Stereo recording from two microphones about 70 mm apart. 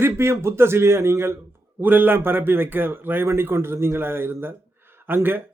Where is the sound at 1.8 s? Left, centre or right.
Right.